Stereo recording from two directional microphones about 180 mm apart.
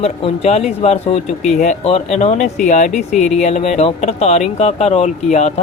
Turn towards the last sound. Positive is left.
turn(degrees=40)  # may be behind; listen again after turning